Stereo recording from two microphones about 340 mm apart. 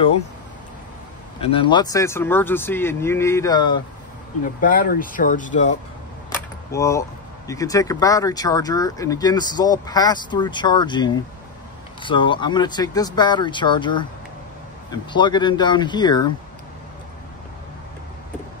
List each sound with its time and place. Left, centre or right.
1.4 s speech: centre
4.6 s speech: left
6.3 s speech: centre